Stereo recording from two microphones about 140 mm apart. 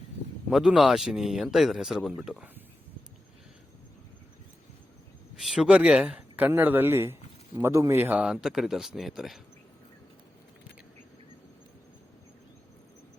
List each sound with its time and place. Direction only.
0.5 s speech: 5° right (ahead or behind)
5.4 s speech: 5° right (ahead or behind)
8.2 s speech: 5° right (ahead or behind)